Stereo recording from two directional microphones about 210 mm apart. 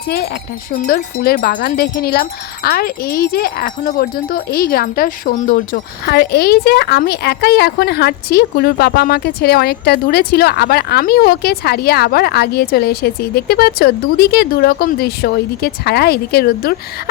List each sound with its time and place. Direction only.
0.7 s speech: 45° left (ahead or behind)